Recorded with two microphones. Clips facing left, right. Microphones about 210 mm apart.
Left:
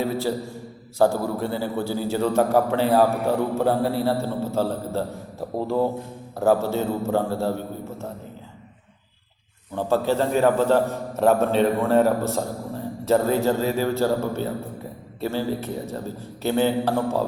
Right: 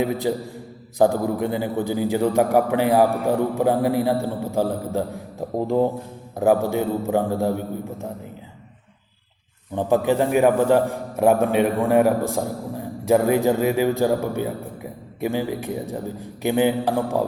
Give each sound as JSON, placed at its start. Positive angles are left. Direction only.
{"t": 0.0, "sound": "a man's voice", "side_deg": -15}
{"t": 9.7, "sound": "a man's voice", "side_deg": -15}